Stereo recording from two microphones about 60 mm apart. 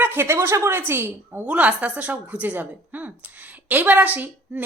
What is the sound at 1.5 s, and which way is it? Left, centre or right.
A woman's voice, right.